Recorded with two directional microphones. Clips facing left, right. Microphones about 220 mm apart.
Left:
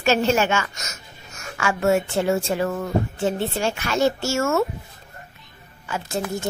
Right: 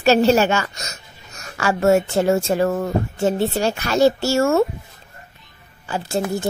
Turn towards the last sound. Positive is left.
turn(degrees=-30)  # may be behind; listen again after turning